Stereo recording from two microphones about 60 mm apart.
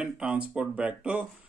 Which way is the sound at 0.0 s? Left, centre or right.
Centre.